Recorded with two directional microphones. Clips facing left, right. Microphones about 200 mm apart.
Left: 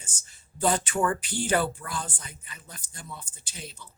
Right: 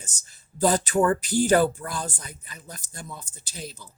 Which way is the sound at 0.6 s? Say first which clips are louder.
Right 4 dB; 35° right (ahead or behind).